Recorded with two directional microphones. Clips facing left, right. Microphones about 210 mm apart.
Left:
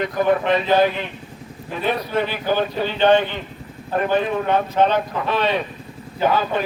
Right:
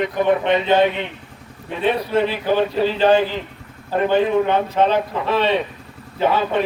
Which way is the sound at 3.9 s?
25° right (ahead or behind).